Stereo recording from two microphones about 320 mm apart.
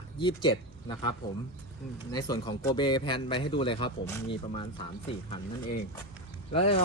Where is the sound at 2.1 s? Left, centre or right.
Centre.